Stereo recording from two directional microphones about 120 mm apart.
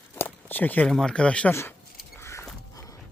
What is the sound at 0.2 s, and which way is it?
Speech, 15° left (ahead or behind).